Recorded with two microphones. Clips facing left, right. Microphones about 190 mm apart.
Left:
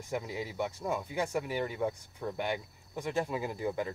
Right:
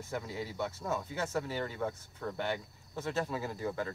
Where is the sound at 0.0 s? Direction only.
15° left (ahead or behind).